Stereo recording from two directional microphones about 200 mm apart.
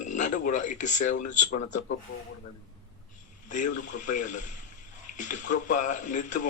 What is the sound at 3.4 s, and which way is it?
A man's voice, 40° left (ahead or behind).